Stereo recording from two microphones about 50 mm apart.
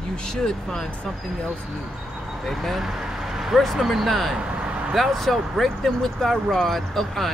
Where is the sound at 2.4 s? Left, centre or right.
Centre.